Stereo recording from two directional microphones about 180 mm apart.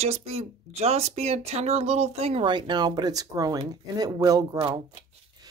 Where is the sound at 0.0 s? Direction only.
35° right (ahead or behind).